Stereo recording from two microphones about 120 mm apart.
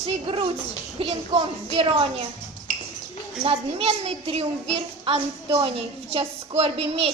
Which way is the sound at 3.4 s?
55° right (ahead or behind).